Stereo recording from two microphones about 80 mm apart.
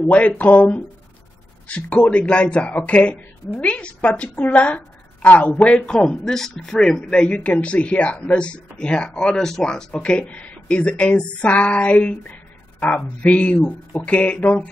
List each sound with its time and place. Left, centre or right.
0.0 s a woman's voice: centre
1.9 s a woman's voice: centre